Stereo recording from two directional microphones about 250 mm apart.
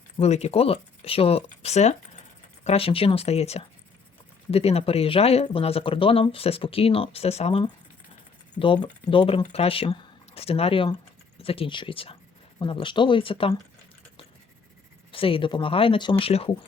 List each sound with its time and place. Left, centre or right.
0.2 s speech: left
15.1 s speech: left